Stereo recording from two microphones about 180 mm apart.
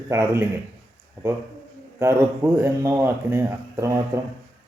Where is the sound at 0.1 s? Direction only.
15° right (ahead or behind).